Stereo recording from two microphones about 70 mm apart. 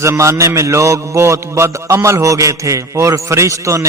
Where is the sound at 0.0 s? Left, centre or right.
Right.